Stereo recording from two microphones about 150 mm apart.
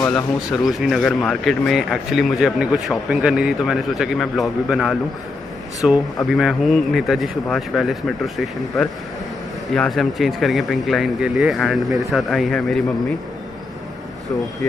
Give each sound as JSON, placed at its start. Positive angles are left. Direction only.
{"t": 0.1, "sound": "speech", "side_deg": -5}